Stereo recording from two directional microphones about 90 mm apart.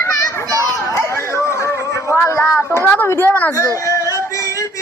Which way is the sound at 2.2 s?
35° left (ahead or behind).